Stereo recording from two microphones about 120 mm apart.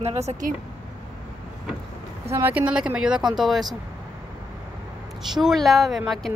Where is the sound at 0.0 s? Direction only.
70° right (ahead or behind).